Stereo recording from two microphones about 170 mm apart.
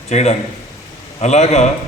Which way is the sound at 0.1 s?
40° left (ahead or behind).